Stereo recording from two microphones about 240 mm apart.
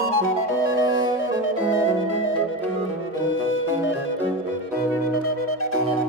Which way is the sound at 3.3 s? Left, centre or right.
Left.